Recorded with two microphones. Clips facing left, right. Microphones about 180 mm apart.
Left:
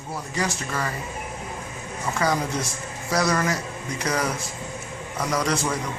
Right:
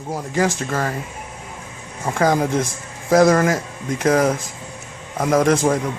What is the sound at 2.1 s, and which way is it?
A man's voice, 50° right (ahead or behind).